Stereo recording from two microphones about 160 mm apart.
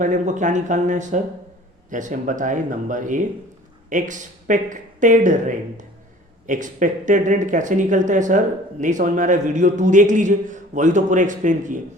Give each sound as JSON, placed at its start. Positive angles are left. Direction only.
{"t": 0.0, "sound": "speech", "side_deg": -50}